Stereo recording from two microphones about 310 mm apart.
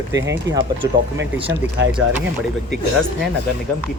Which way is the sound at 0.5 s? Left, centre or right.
Right.